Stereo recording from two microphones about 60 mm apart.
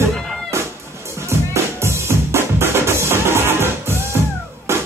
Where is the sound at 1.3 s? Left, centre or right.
Right.